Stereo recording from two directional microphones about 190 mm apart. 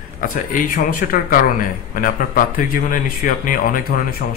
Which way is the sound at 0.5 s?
45° left (ahead or behind).